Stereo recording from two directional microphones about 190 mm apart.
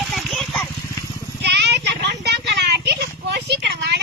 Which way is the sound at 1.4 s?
60° right (ahead or behind).